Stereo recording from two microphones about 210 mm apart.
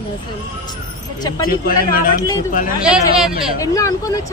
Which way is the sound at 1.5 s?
45° left (ahead or behind).